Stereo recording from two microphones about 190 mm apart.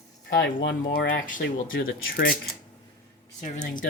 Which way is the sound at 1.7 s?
90° left.